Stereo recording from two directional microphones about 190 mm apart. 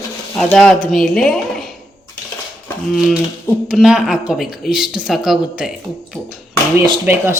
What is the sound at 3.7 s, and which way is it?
Speech, centre (ahead or behind).